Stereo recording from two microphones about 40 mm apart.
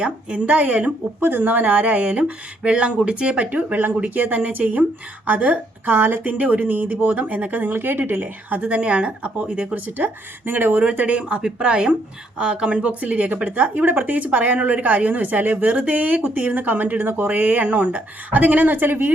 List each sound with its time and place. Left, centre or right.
0.0 s a woman's voice: right
5.9 s a woman's voice: right
6.2 s a woman's voice: right
7.7 s a woman's voice: right
9.7 s a woman's voice: right
10.9 s a woman's voice: right
17.6 s a woman's voice: right